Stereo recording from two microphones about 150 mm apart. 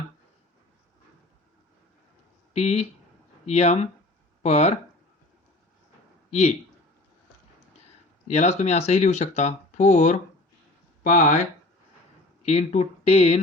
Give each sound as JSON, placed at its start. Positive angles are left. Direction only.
{"t": 2.5, "sound": "speech", "side_deg": 45}
{"t": 8.3, "sound": "speech", "side_deg": 45}
{"t": 12.4, "sound": "speech", "side_deg": 45}